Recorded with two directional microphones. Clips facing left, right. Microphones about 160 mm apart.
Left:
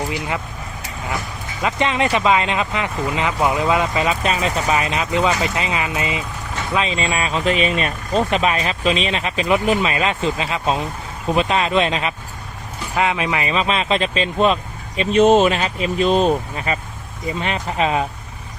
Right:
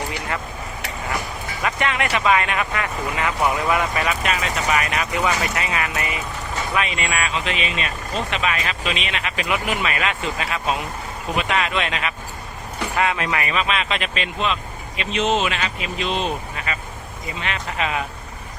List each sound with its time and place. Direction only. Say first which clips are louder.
1.6 s speech: left 4 dB; 25° left (ahead or behind)
4.2 s speech: left 3 dB; 30° left (ahead or behind)
13.0 s speech: left 3 dB; 20° left (ahead or behind)